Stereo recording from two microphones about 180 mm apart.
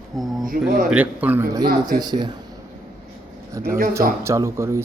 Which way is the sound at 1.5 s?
20° right (ahead or behind).